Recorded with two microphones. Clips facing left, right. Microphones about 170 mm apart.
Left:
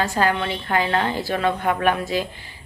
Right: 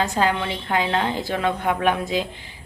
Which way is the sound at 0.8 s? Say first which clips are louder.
Left 1 dB; 5° right (ahead or behind).